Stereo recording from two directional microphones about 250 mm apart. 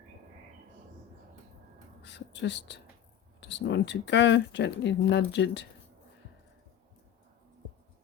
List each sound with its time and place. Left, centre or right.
2.0 s speech: left